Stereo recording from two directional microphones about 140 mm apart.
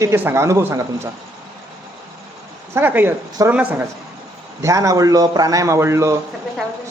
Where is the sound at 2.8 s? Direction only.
15° right (ahead or behind).